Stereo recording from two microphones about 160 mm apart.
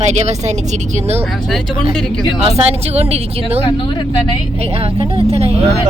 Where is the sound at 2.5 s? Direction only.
40° right (ahead or behind).